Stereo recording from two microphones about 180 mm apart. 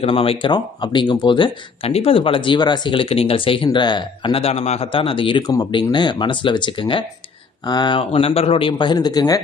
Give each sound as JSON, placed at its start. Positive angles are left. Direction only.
{"t": 0.0, "sound": "speech", "side_deg": 30}